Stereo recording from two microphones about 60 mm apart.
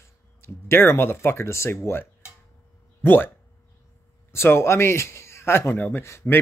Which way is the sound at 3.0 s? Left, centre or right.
Left.